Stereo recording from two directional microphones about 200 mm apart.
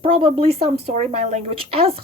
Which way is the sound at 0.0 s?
25° right (ahead or behind).